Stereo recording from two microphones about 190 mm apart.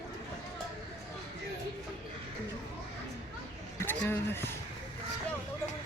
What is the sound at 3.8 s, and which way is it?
Speech, 10° left (ahead or behind).